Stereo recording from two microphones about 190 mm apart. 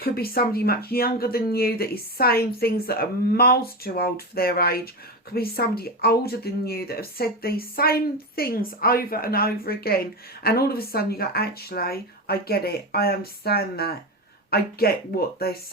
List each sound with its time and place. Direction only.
0.0 s speech: 50° left (ahead or behind)